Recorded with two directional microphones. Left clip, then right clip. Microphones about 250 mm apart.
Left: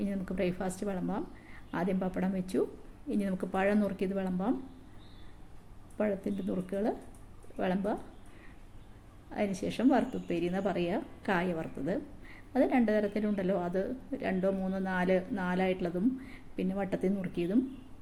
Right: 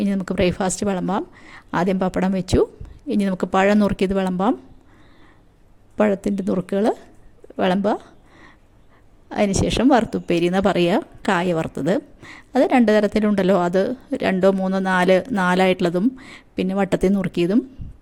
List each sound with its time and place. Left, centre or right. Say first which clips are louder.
0.0 s a woman's voice: right 13 dB; right
6.0 s a woman's voice: right 13 dB; right
9.3 s a woman's voice: right 14 dB; right